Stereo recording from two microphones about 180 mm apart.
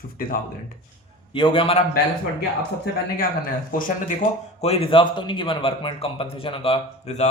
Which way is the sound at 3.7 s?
50° left (ahead or behind).